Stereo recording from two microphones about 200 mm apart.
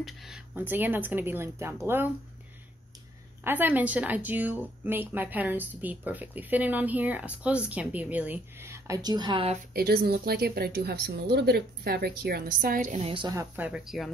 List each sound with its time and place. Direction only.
0.0 s a woman's voice: centre (ahead or behind)
3.4 s a woman's voice: 10° right (ahead or behind); by 9.6 s 25° right (ahead or behind)
9.8 s speech: 50° right (ahead or behind)
13.1 s a woman's voice: 20° right (ahead or behind); by 14.1 s centre (ahead or behind)